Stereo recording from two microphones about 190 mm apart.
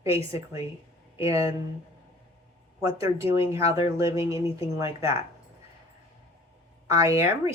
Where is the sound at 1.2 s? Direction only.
15° right (ahead or behind).